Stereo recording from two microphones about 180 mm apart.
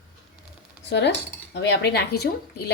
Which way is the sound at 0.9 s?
75° left (ahead or behind).